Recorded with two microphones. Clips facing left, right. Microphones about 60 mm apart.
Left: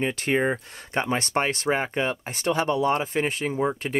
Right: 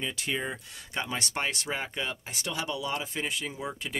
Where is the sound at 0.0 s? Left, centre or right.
Left.